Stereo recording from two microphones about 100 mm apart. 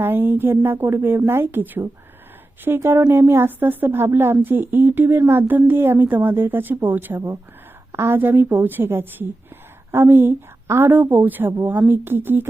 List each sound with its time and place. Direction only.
0.0 s a woman's voice: 20° right (ahead or behind)